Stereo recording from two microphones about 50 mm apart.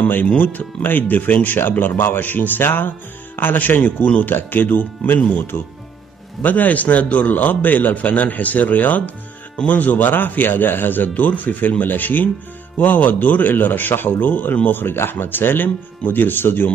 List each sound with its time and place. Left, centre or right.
0.4 s speech: left
1.6 s speech: left
4.3 s speech: left
6.4 s speech: left